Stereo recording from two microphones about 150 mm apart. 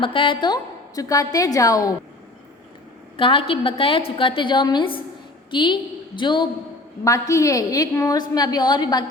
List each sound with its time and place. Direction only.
0.0 s a woman's voice: 35° left (ahead or behind)
3.2 s a woman's voice: 35° left (ahead or behind)